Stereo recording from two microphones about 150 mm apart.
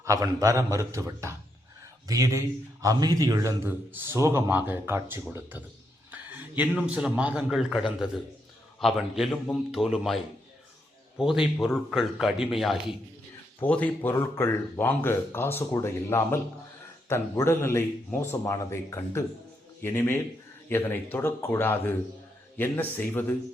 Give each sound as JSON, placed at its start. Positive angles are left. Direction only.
{"t": 0.0, "sound": "a man's voice", "side_deg": -20}
{"t": 11.2, "sound": "a man's voice", "side_deg": -5}
{"t": 13.6, "sound": "speech", "side_deg": 10}